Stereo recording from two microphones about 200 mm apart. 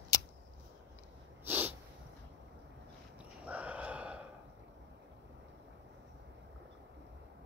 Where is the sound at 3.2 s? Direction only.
5° right (ahead or behind).